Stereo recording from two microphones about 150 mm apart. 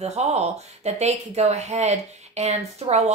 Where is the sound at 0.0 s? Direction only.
45° right (ahead or behind).